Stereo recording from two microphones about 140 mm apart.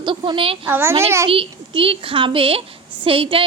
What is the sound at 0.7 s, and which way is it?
Speech, 15° right (ahead or behind).